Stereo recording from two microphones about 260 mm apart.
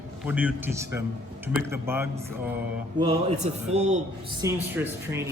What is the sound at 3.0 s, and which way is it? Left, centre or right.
A man's voice, right.